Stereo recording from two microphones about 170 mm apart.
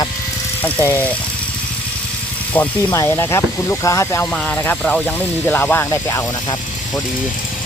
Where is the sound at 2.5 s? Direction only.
15° left (ahead or behind).